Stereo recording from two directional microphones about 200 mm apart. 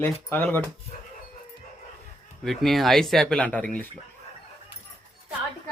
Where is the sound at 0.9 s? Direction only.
40° left (ahead or behind).